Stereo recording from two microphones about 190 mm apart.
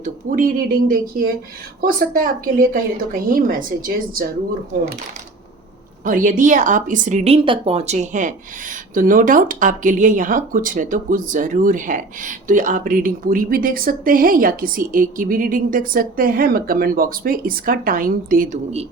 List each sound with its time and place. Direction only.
0.0 s speech: 45° right (ahead or behind)
6.1 s speech: 45° right (ahead or behind)